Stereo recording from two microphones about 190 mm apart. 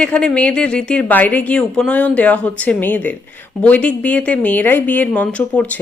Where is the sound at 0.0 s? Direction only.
5° left (ahead or behind).